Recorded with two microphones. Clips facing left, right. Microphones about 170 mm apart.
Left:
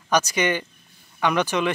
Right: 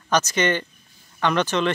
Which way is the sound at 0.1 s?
10° left (ahead or behind).